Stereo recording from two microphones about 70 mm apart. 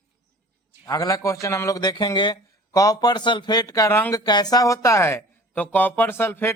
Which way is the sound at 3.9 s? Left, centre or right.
Left.